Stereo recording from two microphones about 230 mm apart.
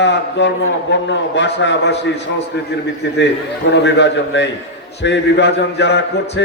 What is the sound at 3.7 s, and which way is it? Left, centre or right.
A man's voice, left.